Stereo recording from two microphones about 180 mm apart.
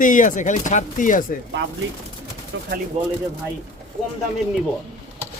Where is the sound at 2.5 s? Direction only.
90° right.